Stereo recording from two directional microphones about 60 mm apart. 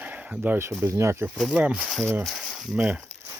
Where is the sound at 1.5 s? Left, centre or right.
Right.